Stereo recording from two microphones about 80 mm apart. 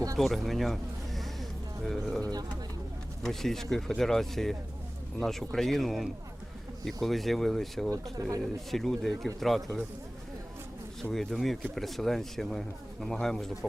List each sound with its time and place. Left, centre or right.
0.2 s a sound: centre
2.2 s speech: right
3.2 s speech: centre
8.2 s speech: right
8.7 s speech: centre
11.1 s speech: centre